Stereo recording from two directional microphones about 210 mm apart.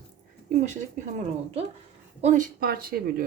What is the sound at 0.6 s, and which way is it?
Speech, 35° right (ahead or behind).